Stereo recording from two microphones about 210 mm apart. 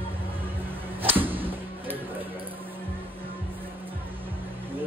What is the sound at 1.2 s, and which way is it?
Music, 10° right (ahead or behind).